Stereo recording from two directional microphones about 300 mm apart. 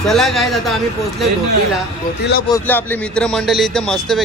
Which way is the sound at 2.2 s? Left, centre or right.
Left.